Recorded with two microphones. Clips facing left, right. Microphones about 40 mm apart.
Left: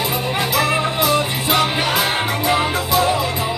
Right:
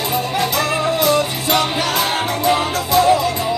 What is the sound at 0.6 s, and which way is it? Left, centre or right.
Music, centre.